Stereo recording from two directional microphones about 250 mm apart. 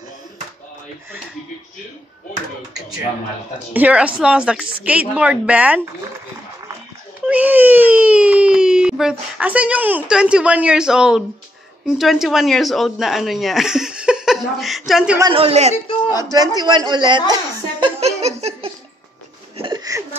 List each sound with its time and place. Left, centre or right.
3.7 s speech: centre
7.2 s speech: centre
15.1 s a man's voice: centre
17.3 s giggle: centre
19.5 s laughter: centre